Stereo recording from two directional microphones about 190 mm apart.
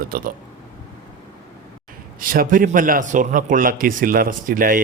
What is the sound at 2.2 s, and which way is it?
A man's voice, 45° right (ahead or behind).